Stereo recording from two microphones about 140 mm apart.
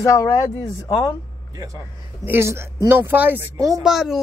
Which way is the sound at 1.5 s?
25° right (ahead or behind).